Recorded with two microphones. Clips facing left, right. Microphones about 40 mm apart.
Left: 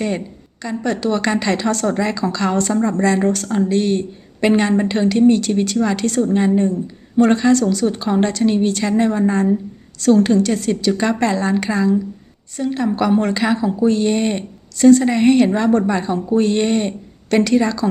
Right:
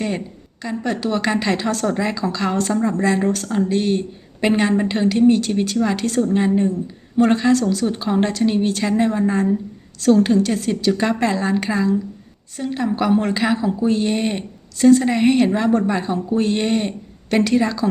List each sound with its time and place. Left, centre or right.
0.6 s a woman's voice: centre